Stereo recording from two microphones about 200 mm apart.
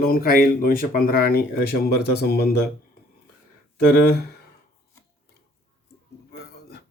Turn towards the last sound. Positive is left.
turn(degrees=50)  # may be behind; listen again after turning